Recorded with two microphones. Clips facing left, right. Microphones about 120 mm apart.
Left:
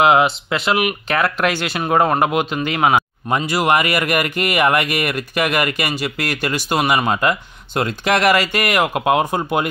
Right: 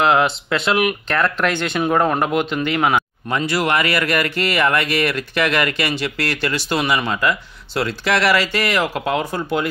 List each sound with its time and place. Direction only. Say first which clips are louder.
0.0 s speech: left 2 dB; 10° left (ahead or behind)
7.1 s speech: left 2 dB; 25° left (ahead or behind)